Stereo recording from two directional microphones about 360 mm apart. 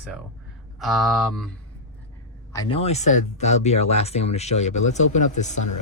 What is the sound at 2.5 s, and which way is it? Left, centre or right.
Speech, centre.